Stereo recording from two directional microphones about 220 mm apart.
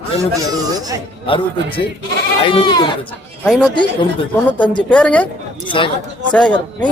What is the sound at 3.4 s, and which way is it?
Speech, 5° right (ahead or behind).